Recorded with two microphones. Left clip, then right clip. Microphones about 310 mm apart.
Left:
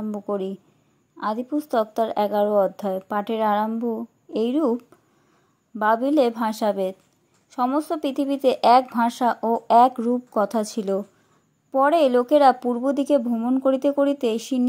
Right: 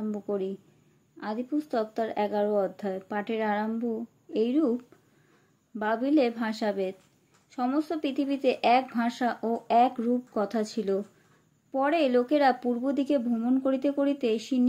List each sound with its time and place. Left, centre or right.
0.1 s speech: left